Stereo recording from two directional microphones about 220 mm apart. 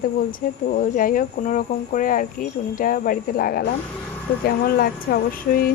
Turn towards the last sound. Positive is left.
turn(degrees=40)  # may be behind; listen again after turning